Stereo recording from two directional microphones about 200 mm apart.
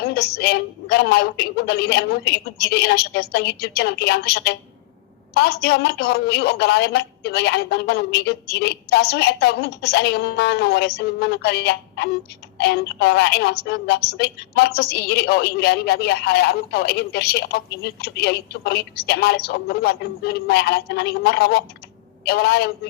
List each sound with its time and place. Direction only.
0.0 s a woman's voice: 55° left (ahead or behind)